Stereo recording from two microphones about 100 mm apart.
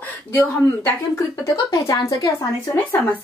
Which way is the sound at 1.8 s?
40° left (ahead or behind).